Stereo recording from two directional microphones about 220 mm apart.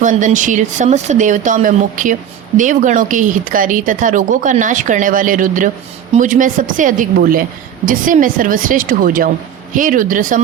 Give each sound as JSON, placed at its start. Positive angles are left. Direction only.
{"t": 0.0, "sound": "a woman's voice", "side_deg": -35}